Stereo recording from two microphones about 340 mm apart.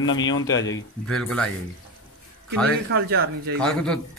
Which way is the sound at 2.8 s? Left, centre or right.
Right.